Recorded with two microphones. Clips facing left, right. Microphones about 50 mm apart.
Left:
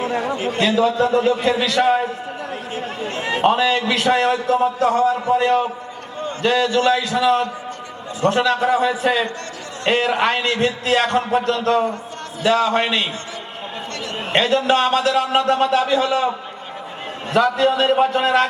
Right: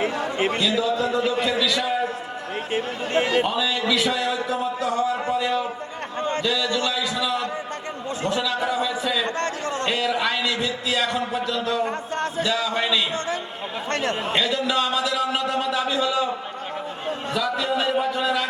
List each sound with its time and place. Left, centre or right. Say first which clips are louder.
0.1 s a sound: left 5 dB; left
0.3 s a man's voice: even; right
0.8 s a man's voice: left 6 dB; left
3.4 s a man's voice: left 7 dB; left
6.1 s a sound: right 2 dB; right
6.4 s a man's voice: left 10 dB; left
13.9 s a man's voice: right 7 dB; right
14.3 s a man's voice: left 9 dB; left
17.3 s a man's voice: left 9 dB; left